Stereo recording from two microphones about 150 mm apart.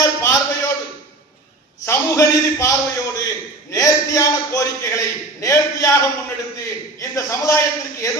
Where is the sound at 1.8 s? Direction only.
20° left (ahead or behind).